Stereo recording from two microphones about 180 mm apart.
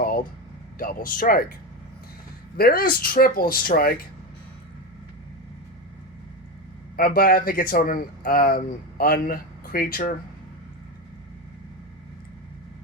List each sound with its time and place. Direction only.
0.8 s speech: 50° left (ahead or behind)
2.6 s speech: 55° left (ahead or behind)
6.9 s speech: 55° left (ahead or behind)